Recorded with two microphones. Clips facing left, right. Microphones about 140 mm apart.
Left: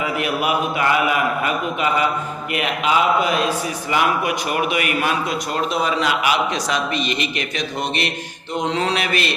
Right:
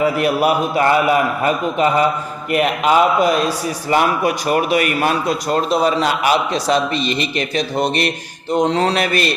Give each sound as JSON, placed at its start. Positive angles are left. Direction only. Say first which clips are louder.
{"t": 0.0, "sound": "a man's voice", "louder": "right 6 dB", "side_deg": -40}